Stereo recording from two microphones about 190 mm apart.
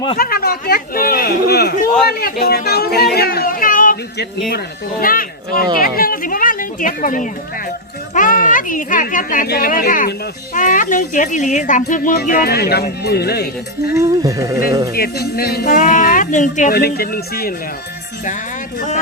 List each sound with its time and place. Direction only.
0.2 s a woman's voice: 50° left (ahead or behind)
13.9 s speech: 15° right (ahead or behind)
14.9 s a woman's voice: 55° left (ahead or behind)
16.7 s a woman's voice: 55° left (ahead or behind)